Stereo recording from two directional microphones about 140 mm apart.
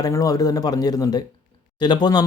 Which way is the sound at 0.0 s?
25° left (ahead or behind).